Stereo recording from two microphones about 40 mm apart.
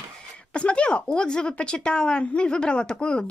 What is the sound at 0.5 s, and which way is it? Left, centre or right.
Speech, left.